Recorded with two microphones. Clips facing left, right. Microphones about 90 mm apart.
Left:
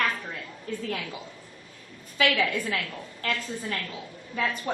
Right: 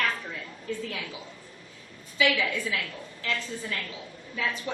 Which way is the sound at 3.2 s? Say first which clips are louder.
Left 2 dB; 50° left (ahead or behind).